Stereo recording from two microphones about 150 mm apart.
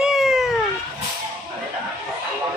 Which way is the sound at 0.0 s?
Centre (ahead or behind).